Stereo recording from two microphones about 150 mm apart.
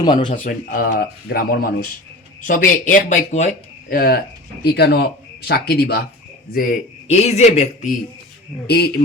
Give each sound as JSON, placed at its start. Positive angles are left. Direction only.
{"t": 0.0, "sound": "speech", "side_deg": 30}
{"t": 0.3, "sound": "speech", "side_deg": 70}
{"t": 2.5, "sound": "speech", "side_deg": 60}
{"t": 6.5, "sound": "speech", "side_deg": 80}
{"t": 7.1, "sound": "a man's voice", "side_deg": 50}
{"t": 8.6, "sound": "speech", "side_deg": 90}